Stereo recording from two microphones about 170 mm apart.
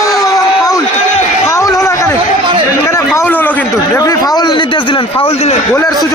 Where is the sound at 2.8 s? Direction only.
15° left (ahead or behind).